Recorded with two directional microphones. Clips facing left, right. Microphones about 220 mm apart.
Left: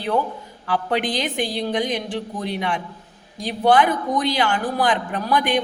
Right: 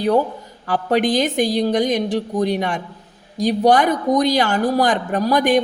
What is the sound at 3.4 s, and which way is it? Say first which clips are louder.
Speech: right 3 dB; 40° right (ahead or behind).